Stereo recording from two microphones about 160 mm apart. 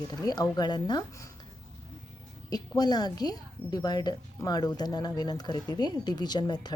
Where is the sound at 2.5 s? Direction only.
25° left (ahead or behind).